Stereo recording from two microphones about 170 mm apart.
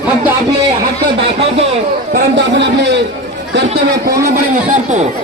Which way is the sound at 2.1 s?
90° right.